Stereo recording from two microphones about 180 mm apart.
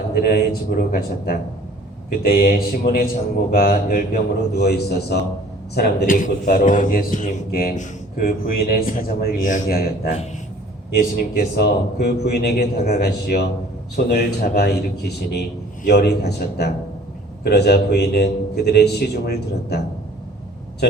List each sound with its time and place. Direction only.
0.8 s a man's voice: 55° left (ahead or behind)